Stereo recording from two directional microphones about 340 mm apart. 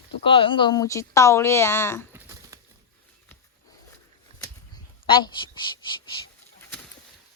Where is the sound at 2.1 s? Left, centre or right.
Centre.